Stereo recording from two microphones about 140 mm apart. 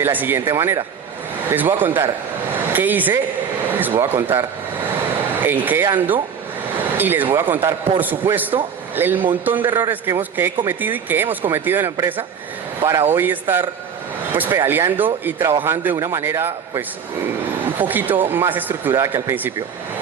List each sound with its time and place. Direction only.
0.0 s speech: 15° right (ahead or behind)
3.7 s a sound: 15° right (ahead or behind)
4.3 s speech: 15° right (ahead or behind)
17.7 s speech: 15° right (ahead or behind)